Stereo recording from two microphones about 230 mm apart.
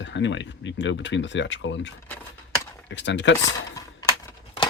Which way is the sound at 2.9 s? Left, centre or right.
Left.